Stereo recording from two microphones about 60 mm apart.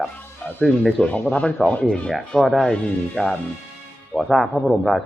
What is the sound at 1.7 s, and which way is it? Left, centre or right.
Speech, left.